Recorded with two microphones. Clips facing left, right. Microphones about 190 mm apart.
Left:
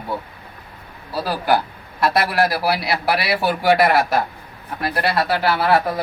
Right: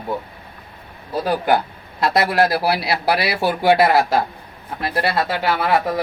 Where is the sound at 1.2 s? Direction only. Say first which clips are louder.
Right 1 dB; 20° right (ahead or behind).